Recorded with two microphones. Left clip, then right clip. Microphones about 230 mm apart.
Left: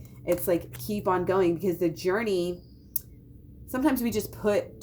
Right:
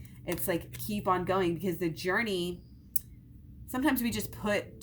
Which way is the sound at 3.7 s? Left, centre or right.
Right.